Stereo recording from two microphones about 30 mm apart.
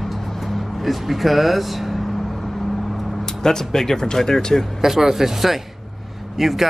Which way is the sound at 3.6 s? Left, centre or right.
Centre.